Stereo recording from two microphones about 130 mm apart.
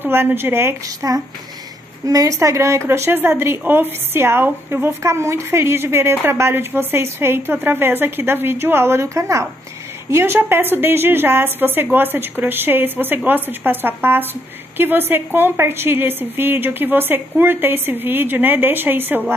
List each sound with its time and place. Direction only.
0.0 s a woman's voice: 15° right (ahead or behind)